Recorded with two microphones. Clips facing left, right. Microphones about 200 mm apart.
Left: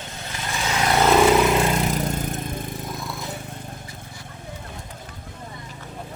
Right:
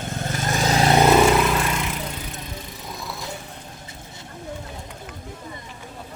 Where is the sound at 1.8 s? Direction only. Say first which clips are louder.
Left 6 dB; 45° left (ahead or behind).